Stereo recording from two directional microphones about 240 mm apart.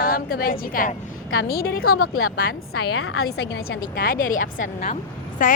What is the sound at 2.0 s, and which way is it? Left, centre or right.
A woman's voice, left.